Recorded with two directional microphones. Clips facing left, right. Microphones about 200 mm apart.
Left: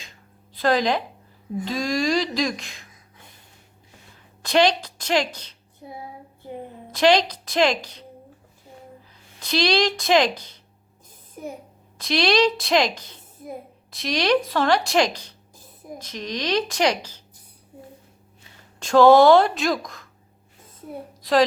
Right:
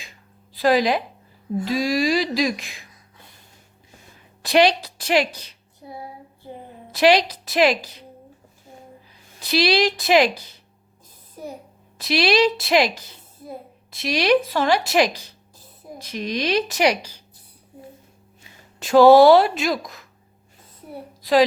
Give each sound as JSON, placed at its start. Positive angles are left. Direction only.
{"t": 0.5, "sound": "a woman's voice", "side_deg": -5}
{"t": 4.4, "sound": "a woman's voice", "side_deg": -10}
{"t": 6.9, "sound": "a woman's voice", "side_deg": -10}
{"t": 9.4, "sound": "a woman's voice", "side_deg": -5}
{"t": 11.9, "sound": "a woman's voice", "side_deg": -5}
{"t": 18.8, "sound": "a woman's voice", "side_deg": -5}
{"t": 21.2, "sound": "a woman's voice", "side_deg": 0}